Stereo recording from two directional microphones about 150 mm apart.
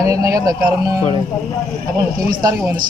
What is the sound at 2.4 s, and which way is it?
Speech, 20° right (ahead or behind).